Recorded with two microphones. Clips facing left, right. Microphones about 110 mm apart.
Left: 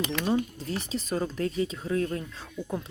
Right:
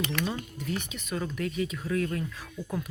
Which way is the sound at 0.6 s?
30° left (ahead or behind).